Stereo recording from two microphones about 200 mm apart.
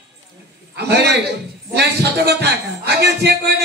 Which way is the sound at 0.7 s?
55° right (ahead or behind).